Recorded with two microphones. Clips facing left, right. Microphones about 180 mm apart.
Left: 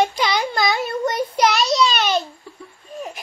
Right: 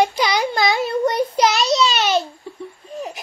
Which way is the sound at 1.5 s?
20° right (ahead or behind).